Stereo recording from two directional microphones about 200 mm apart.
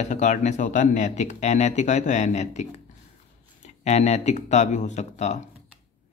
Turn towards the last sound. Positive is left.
turn(degrees=35)  # may be behind; listen again after turning